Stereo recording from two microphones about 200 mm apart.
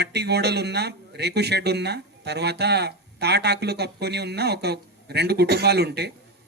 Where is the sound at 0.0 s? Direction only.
55° right (ahead or behind).